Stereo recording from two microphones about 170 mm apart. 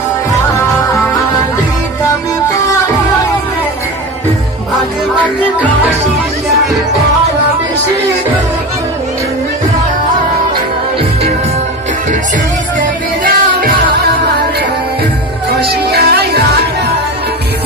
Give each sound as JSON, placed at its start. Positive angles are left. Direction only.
{"t": 12.8, "sound": "music", "side_deg": -55}
{"t": 15.6, "sound": "music", "side_deg": -75}